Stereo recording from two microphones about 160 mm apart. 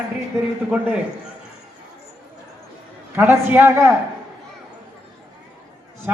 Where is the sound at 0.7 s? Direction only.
10° right (ahead or behind).